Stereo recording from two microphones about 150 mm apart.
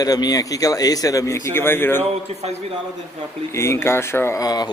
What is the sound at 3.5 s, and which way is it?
A man's voice, 20° left (ahead or behind).